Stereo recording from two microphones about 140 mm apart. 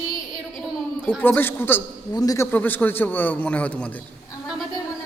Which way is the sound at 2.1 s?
25° left (ahead or behind).